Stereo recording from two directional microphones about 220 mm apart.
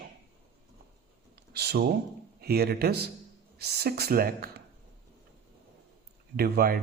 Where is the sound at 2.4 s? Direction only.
45° right (ahead or behind).